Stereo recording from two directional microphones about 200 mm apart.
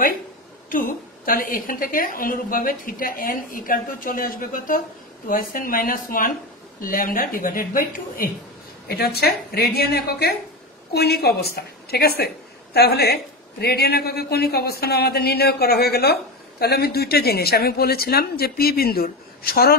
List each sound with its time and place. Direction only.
0.7 s a woman's voice: 45° left (ahead or behind)